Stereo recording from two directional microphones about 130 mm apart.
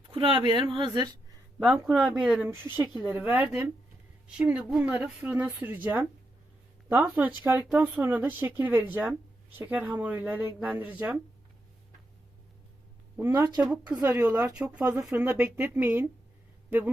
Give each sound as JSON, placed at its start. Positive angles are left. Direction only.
{"t": 0.3, "sound": "speech", "side_deg": -40}
{"t": 1.5, "sound": "speech", "side_deg": -10}
{"t": 2.5, "sound": "speech", "side_deg": -15}
{"t": 13.1, "sound": "speech", "side_deg": -15}
{"t": 13.7, "sound": "speech", "side_deg": -5}